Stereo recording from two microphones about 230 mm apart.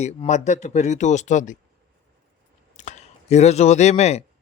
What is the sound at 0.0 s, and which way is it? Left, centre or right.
Speech, left.